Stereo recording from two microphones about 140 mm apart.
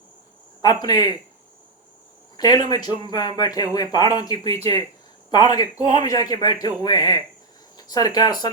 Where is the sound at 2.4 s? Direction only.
30° left (ahead or behind).